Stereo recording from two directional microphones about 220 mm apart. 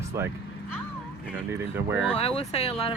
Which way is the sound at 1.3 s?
10° right (ahead or behind).